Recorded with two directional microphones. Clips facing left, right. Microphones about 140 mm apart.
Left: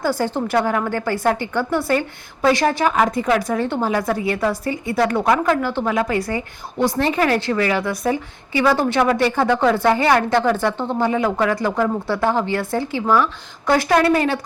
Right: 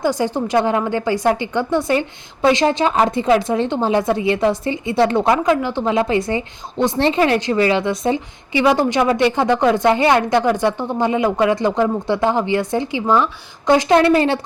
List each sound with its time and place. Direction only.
0.0 s a woman's voice: 15° right (ahead or behind)